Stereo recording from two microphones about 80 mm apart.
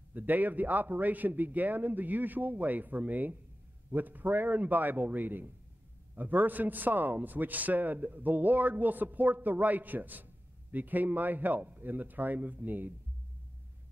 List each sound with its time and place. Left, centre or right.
0.1 s a man's voice: right